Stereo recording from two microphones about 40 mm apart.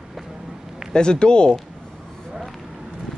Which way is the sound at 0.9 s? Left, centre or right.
Left.